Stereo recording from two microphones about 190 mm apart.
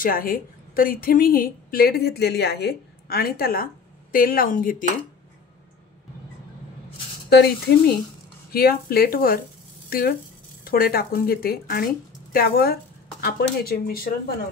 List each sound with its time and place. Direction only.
0.0 s a woman's voice: 50° left (ahead or behind)
7.2 s a woman's voice: 55° left (ahead or behind)